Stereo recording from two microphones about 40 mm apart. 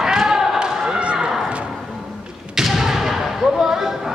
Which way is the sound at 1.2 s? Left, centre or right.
Centre.